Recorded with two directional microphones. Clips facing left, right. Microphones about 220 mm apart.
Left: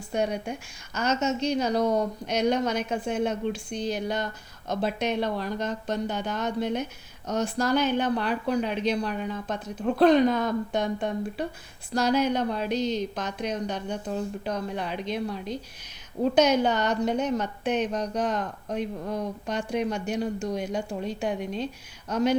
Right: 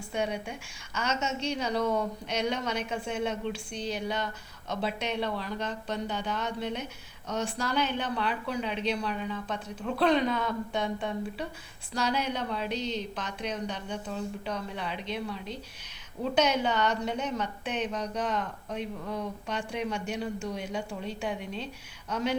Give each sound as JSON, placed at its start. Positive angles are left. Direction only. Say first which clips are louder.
{"t": 0.1, "sound": "a woman's voice", "louder": "left 5 dB", "side_deg": 40}